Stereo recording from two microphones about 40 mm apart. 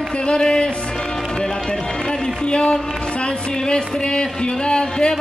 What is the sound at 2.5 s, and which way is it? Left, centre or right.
Speech, left.